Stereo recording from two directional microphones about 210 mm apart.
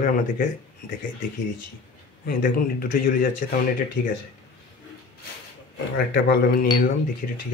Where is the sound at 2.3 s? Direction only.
40° left (ahead or behind).